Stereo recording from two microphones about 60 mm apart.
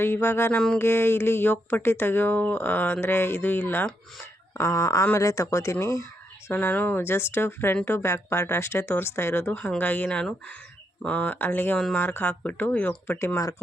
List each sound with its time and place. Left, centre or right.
0.0 s speech: left
4.5 s speech: left
6.5 s speech: left
9.7 s speech: left
13.1 s speech: left